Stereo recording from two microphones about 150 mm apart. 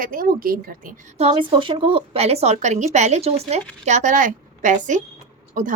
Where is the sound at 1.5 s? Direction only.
35° right (ahead or behind).